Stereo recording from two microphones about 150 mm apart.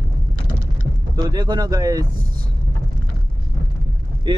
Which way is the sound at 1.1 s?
30° right (ahead or behind).